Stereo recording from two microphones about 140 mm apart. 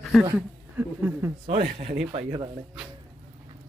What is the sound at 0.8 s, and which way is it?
Speech, 15° right (ahead or behind).